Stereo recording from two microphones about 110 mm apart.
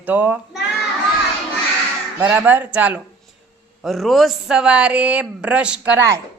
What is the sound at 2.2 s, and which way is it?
Speech, 15° right (ahead or behind).